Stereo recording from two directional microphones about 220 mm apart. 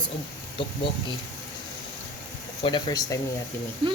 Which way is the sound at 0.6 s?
25° left (ahead or behind).